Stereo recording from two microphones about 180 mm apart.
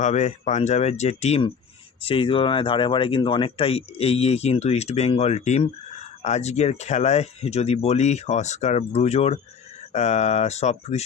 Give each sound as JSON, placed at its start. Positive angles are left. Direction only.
{"t": 0.0, "sound": "speech", "side_deg": 40}